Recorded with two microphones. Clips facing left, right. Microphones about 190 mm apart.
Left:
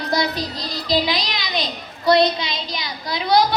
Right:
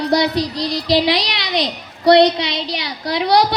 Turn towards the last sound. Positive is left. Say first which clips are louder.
# right 3 dB
turn(degrees=-75)  # may be behind; listen again after turning